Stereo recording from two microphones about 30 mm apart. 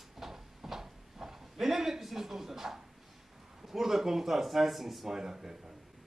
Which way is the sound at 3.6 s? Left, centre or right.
Centre.